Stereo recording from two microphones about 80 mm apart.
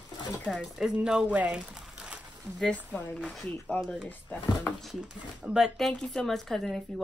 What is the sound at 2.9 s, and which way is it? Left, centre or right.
Speech, left.